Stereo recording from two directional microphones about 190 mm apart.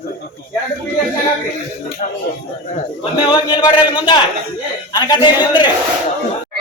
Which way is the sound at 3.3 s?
25° left (ahead or behind).